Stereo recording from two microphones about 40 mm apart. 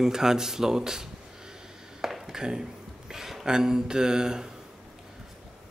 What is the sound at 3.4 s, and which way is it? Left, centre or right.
Speech, centre.